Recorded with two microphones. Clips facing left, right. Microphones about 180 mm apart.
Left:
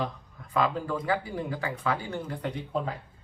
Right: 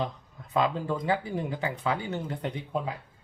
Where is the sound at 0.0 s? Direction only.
20° right (ahead or behind).